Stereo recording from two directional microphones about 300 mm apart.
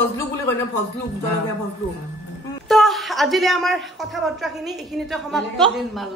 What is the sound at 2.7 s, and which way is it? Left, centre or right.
A man's voice, centre.